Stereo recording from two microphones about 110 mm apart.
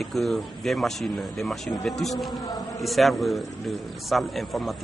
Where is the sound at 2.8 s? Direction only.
Centre (ahead or behind).